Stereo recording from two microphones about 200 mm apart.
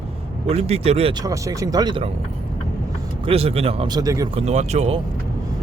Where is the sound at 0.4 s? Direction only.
30° right (ahead or behind).